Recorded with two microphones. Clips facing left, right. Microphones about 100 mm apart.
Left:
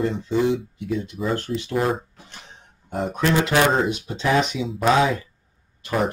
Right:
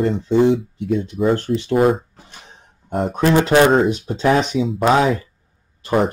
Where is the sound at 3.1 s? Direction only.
35° right (ahead or behind).